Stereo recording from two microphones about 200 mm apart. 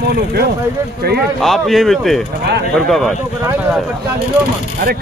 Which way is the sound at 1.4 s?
Centre (ahead or behind).